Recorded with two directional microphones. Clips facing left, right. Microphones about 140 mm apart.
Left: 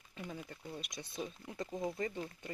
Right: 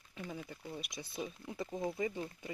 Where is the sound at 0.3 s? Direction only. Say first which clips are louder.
Right 1 dB; 5° right (ahead or behind).